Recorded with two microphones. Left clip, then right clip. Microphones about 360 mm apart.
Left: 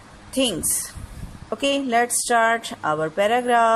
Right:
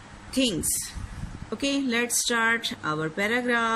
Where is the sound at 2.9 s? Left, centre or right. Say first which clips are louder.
Left 6 dB; left.